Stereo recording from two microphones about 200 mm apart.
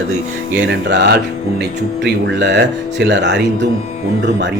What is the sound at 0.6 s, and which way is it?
Speech, 60° right (ahead or behind).